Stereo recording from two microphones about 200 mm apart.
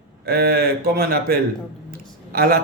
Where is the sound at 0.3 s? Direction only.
50° right (ahead or behind).